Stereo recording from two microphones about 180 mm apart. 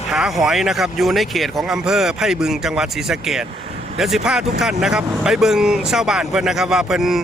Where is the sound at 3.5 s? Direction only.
35° right (ahead or behind).